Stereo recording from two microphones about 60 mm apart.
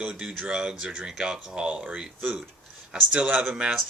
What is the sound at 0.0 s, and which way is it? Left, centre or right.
Speech, centre.